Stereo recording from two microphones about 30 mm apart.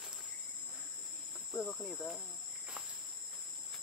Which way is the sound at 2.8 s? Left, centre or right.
Right.